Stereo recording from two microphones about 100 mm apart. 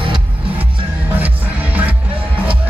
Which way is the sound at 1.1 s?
15° right (ahead or behind).